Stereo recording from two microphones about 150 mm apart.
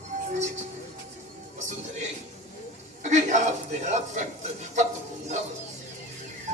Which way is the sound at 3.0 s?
50° right (ahead or behind).